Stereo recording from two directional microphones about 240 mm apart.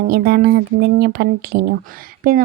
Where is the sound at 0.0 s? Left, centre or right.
Right.